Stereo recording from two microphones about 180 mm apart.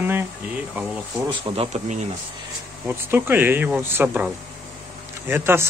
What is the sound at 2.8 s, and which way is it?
Speech, 10° right (ahead or behind).